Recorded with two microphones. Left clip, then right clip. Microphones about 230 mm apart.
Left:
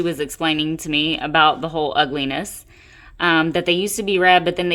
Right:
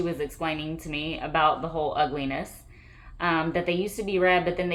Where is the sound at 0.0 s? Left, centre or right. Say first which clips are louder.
Left 8 dB; left.